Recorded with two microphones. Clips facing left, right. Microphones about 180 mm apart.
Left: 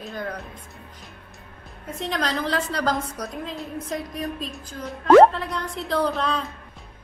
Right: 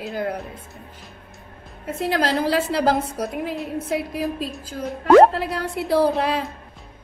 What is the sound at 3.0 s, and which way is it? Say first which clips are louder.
Speech: right 5 dB; 25° right (ahead or behind).